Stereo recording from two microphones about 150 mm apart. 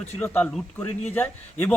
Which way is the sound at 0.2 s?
5° left (ahead or behind).